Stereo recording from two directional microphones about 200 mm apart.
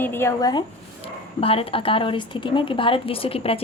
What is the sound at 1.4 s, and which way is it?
A woman's voice, 30° left (ahead or behind).